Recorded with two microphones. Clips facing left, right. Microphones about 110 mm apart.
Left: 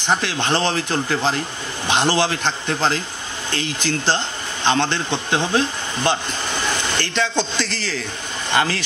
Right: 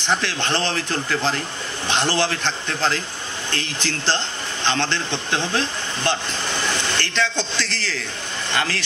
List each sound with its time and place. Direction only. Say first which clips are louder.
0.0 s a man's voice: left 2 dB; 15° left (ahead or behind)